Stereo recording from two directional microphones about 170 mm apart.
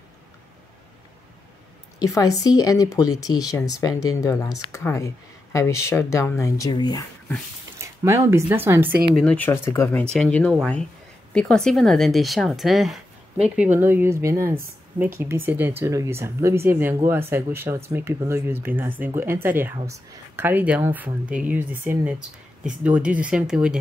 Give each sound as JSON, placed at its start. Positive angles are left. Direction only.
{"t": 2.0, "sound": "speech", "side_deg": 20}
{"t": 7.8, "sound": "speech", "side_deg": -15}
{"t": 9.1, "sound": "speech", "side_deg": 5}
{"t": 13.6, "sound": "speech", "side_deg": -10}